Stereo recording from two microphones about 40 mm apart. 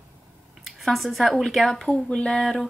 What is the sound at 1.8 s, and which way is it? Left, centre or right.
Speech, left.